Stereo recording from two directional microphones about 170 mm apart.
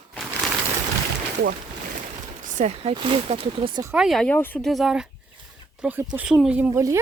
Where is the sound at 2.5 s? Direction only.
40° right (ahead or behind).